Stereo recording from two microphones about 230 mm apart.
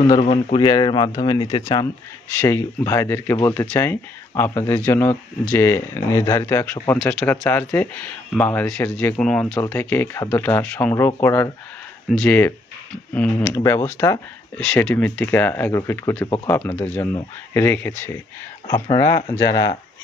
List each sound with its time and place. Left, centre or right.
0.2 s speech: left